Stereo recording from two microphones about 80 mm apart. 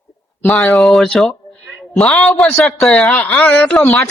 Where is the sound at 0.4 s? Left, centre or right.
Left.